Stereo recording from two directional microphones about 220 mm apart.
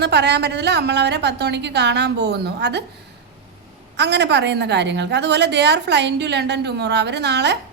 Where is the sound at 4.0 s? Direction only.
50° right (ahead or behind).